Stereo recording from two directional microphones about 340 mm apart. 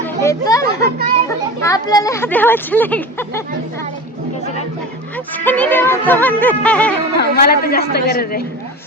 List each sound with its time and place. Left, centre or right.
0.0 s children playing: centre
0.8 s a child's voice: right
1.6 s speech: centre
5.1 s speech: centre
7.2 s a woman's voice: left